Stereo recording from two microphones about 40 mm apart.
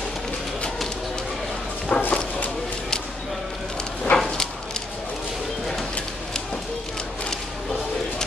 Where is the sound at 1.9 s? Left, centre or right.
Left.